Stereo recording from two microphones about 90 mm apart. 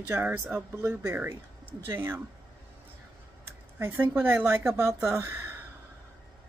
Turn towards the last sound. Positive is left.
turn(degrees=-30)  # may be behind; listen again after turning